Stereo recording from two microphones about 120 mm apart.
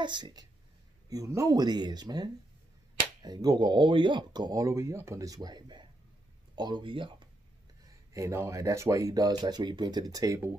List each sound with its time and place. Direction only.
0.0 s speech: 40° right (ahead or behind)
8.1 s speech: 25° right (ahead or behind)